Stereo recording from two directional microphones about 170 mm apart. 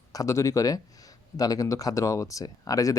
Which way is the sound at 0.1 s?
20° left (ahead or behind).